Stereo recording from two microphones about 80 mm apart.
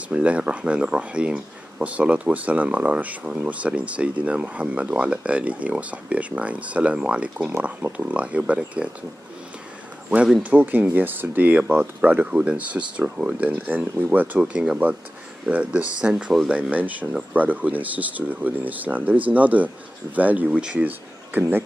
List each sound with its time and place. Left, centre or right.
0.1 s speech: centre
10.0 s speech: centre